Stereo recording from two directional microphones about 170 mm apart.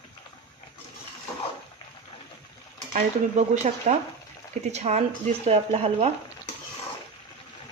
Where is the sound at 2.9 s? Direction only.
45° right (ahead or behind).